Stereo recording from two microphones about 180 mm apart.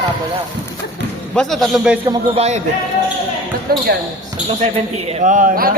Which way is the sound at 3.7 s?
55° right (ahead or behind).